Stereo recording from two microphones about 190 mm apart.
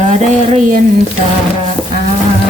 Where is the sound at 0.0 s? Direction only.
40° right (ahead or behind).